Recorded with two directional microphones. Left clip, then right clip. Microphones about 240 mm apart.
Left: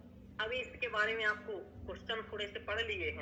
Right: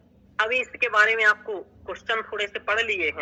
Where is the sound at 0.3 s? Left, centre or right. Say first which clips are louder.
Right 15 dB; right.